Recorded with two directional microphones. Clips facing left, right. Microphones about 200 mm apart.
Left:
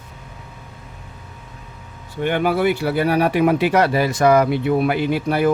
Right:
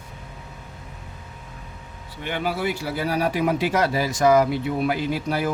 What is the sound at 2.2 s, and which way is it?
Speech, 55° left (ahead or behind).